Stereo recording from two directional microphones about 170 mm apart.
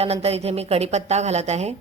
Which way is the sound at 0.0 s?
35° right (ahead or behind).